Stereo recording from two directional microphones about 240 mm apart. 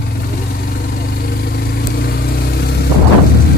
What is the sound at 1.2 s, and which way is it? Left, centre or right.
Vehicle, left.